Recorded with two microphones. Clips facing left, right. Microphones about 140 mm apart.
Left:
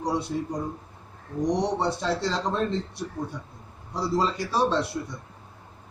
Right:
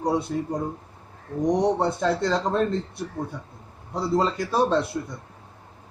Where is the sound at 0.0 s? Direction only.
50° right (ahead or behind).